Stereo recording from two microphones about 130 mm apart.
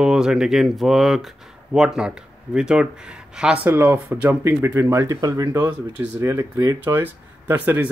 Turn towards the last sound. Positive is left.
turn(degrees=-15)  # may be behind; listen again after turning